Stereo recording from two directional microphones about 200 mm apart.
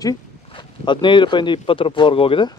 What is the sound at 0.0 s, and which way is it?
Speech, 20° left (ahead or behind).